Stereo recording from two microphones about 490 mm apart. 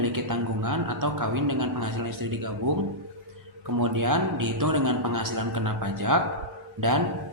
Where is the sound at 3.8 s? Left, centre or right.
Right.